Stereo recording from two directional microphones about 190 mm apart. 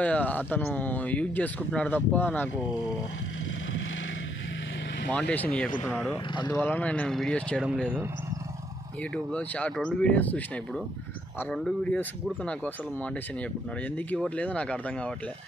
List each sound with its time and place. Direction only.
0.0 s speech: 10° left (ahead or behind)
5.1 s speech: 10° left (ahead or behind)
9.1 s speech: 5° left (ahead or behind)